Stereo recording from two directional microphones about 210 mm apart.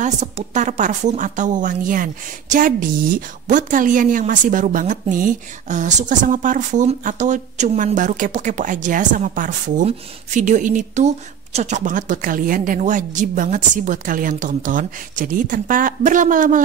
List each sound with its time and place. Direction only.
0.0 s a woman's voice: 35° right (ahead or behind)